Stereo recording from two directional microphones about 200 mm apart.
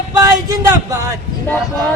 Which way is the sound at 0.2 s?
15° right (ahead or behind).